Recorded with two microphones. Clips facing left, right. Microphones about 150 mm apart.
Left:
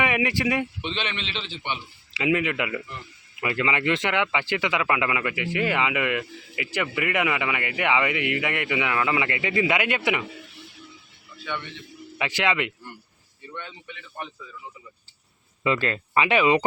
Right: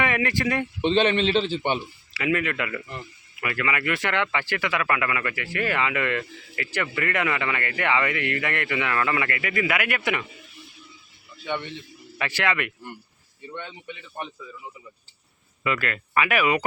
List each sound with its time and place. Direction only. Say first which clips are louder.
0.0 s speech: even; 15° left (ahead or behind)
0.8 s a man's voice: right 11 dB; 40° right (ahead or behind)
2.1 s speech: left 1 dB; 20° left (ahead or behind)
11.5 s speech: right 3 dB; 25° right (ahead or behind)
12.1 s speech: left 1 dB; 15° left (ahead or behind)
13.5 s speech: right 2 dB; 25° right (ahead or behind)
15.6 s speech: left 3 dB; 25° left (ahead or behind)